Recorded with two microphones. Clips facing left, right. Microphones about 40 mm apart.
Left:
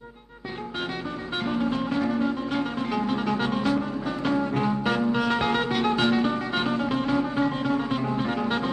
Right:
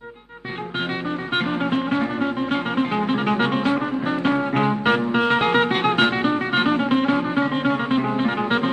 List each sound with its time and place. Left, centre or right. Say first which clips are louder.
1.3 s music: right 4 dB; right